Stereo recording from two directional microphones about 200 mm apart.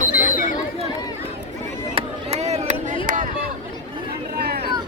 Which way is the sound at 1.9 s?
30° right (ahead or behind).